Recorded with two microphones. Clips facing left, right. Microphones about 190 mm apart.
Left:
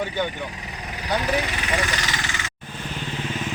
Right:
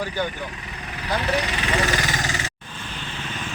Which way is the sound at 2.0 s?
45° right (ahead or behind).